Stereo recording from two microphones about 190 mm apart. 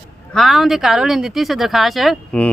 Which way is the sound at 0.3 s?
Centre (ahead or behind).